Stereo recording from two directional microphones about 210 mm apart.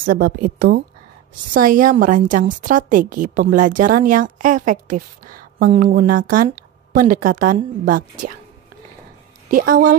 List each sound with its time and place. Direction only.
0.1 s a woman's voice: 45° right (ahead or behind)
9.5 s a woman's voice: 40° right (ahead or behind)